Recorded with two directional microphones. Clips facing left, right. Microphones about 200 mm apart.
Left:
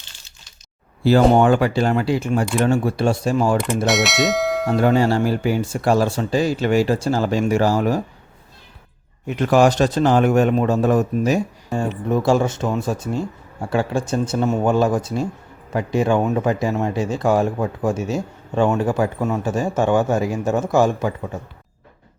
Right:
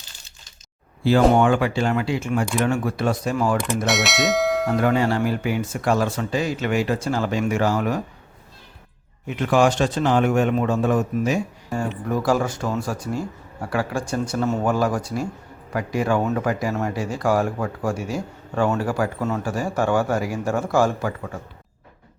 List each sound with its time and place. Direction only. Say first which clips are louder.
1.4 s speech: left 3 dB; 40° left (ahead or behind)
3.8 s speech: left 3 dB; centre (ahead or behind)
4.8 s speech: left 6 dB; 30° left (ahead or behind)
9.2 s speech: left 3 dB; 40° left (ahead or behind)
12.0 s speech: left 4 dB; 25° left (ahead or behind)